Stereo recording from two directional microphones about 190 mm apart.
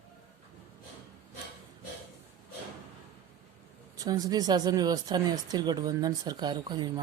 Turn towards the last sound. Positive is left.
turn(degrees=-25)  # may be behind; listen again after turning